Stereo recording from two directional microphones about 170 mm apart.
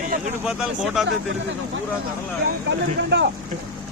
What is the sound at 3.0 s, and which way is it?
Speech, 90° right.